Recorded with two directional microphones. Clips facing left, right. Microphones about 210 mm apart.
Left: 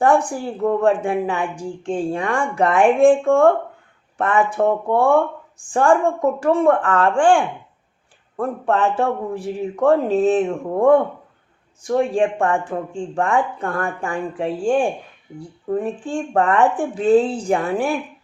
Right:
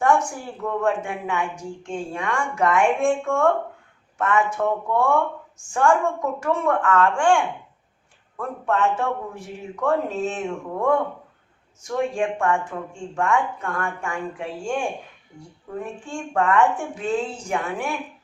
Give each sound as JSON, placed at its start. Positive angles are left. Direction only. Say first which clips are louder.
{"t": 0.0, "sound": "a woman's voice", "louder": "left 4 dB", "side_deg": 35}